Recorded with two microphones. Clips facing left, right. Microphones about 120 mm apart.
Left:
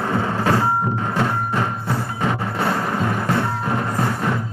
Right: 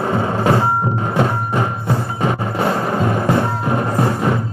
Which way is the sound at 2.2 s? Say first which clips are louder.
Right 3 dB; 20° right (ahead or behind).